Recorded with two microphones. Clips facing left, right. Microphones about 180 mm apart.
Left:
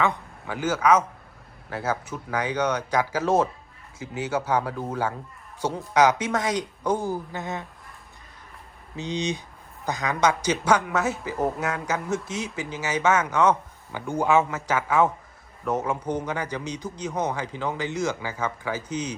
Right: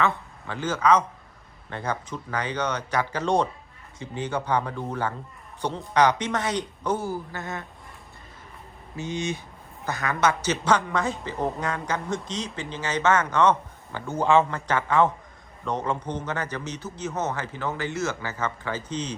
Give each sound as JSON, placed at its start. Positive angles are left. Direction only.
{"t": 0.0, "sound": "a man's voice", "side_deg": 15}
{"t": 9.0, "sound": "a man's voice", "side_deg": 20}